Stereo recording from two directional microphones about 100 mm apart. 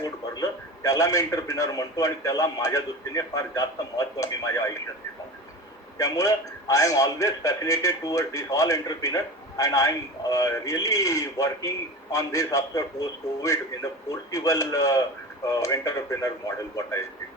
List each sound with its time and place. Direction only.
0.0 s a man's voice: 40° left (ahead or behind)
6.0 s a man's voice: 35° left (ahead or behind)